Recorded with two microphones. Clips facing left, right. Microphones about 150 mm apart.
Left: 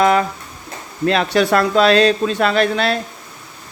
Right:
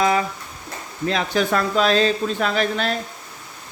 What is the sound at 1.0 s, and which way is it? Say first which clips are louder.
Speech: left 5 dB; 70° left (ahead or behind).